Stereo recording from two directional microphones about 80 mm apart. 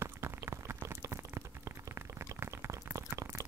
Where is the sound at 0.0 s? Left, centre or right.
Right.